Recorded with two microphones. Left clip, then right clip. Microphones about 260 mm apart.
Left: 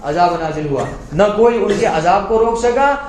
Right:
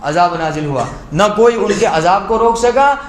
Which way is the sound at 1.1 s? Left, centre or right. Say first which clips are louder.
Right 1 dB; right.